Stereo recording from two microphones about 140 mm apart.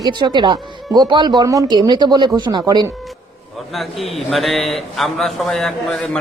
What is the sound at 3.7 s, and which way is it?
A man's voice, centre (ahead or behind).